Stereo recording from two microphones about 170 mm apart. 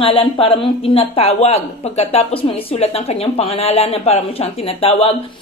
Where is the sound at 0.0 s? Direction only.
35° left (ahead or behind).